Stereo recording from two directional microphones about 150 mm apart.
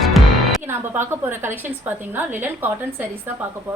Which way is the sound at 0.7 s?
15° right (ahead or behind).